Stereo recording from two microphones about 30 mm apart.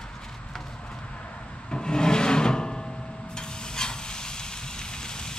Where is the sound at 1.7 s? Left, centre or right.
Left.